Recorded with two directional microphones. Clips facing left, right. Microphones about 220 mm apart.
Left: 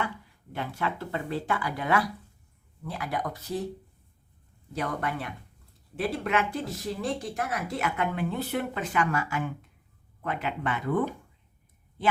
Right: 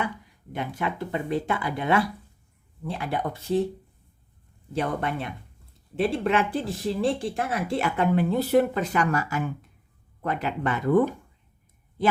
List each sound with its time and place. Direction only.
0.0 s speech: 15° right (ahead or behind)
4.7 s speech: 30° right (ahead or behind)